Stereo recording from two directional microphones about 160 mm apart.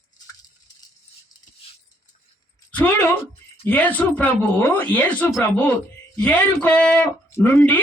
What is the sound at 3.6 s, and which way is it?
Speech, 10° left (ahead or behind).